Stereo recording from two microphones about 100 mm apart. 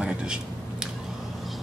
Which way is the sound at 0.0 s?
10° right (ahead or behind).